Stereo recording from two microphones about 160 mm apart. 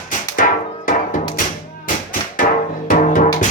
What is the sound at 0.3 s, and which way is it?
Music, 60° left (ahead or behind).